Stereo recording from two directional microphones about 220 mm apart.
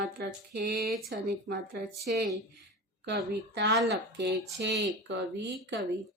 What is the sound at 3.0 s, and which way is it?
Speech, 50° right (ahead or behind).